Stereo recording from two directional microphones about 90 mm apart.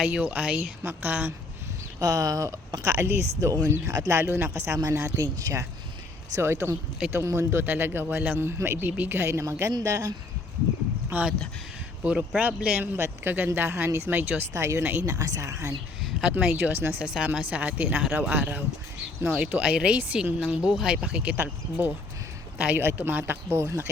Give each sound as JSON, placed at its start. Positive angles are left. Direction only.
{"t": 0.0, "sound": "a woman's voice", "side_deg": -15}
{"t": 2.0, "sound": "speech", "side_deg": -40}
{"t": 4.5, "sound": "speech", "side_deg": -35}
{"t": 6.3, "sound": "speech", "side_deg": -30}
{"t": 11.1, "sound": "a woman's voice", "side_deg": -15}
{"t": 14.5, "sound": "speech", "side_deg": -35}
{"t": 15.2, "sound": "speech", "side_deg": -35}
{"t": 16.5, "sound": "speech", "side_deg": -20}
{"t": 17.2, "sound": "a woman's voice", "side_deg": -10}